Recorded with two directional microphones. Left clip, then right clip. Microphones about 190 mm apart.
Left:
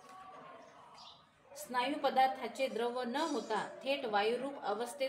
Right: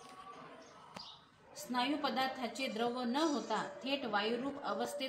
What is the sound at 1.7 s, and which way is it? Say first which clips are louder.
A woman's voice: left 3 dB; 20° left (ahead or behind).